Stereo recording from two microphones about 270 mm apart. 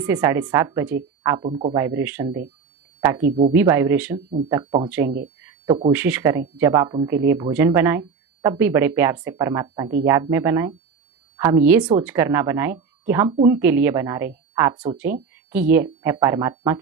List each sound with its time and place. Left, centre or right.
0.0 s speech: centre
3.2 s speech: right
3.5 s speech: centre